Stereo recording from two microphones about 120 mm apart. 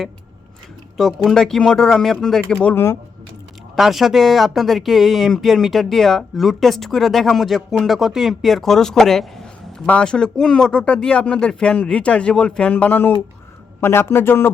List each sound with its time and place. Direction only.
0.9 s speech: centre (ahead or behind)
2.6 s a man's voice: 20° left (ahead or behind)
3.8 s a man's voice: centre (ahead or behind); by 14.5 s 20° left (ahead or behind)